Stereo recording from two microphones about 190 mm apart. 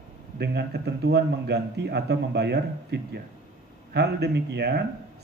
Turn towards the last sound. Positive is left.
turn(degrees=-60)  # may be behind; listen again after turning